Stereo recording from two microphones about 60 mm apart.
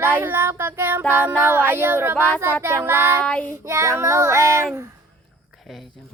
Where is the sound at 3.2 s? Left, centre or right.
Left.